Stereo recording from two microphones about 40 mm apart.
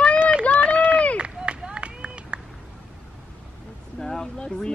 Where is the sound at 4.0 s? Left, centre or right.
Centre.